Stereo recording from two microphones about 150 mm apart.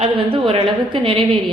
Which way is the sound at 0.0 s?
40° right (ahead or behind).